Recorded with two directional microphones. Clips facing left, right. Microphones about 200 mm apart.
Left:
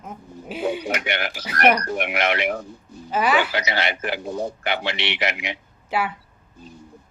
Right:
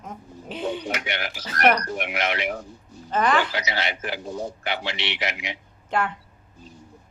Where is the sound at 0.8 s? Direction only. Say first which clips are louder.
Left 4 dB; 65° left (ahead or behind).